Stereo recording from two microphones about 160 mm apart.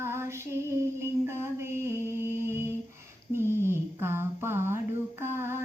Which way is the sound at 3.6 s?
15° right (ahead or behind).